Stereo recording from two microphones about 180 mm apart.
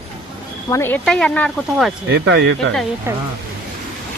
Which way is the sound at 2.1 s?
70° right (ahead or behind).